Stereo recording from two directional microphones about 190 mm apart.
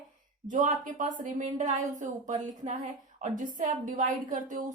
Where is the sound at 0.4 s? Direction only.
40° right (ahead or behind).